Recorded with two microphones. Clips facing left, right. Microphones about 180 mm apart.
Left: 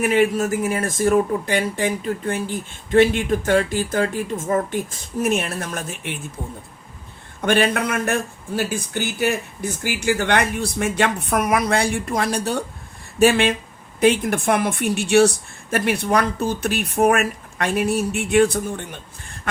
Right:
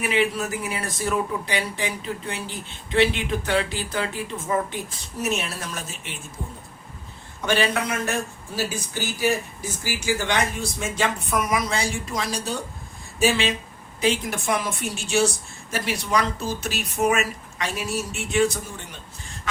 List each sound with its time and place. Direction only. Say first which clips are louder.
0.0 s speech: left 6 dB; 50° left (ahead or behind)
7.4 s speech: left 4 dB; 55° left (ahead or behind)